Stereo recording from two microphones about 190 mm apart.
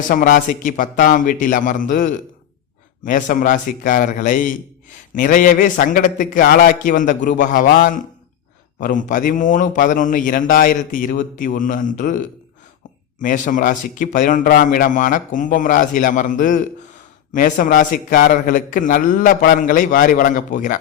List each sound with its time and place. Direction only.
0.1 s a man's voice: 50° left (ahead or behind)